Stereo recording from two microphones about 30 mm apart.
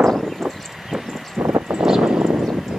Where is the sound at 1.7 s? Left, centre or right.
Centre.